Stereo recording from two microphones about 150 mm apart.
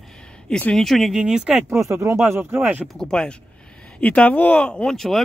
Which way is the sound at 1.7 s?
20° right (ahead or behind).